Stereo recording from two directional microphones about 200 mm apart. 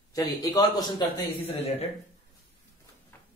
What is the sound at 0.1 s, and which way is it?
Speech, 15° left (ahead or behind).